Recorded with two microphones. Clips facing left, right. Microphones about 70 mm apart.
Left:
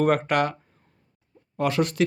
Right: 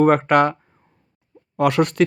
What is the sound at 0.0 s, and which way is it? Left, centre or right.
Speech, right.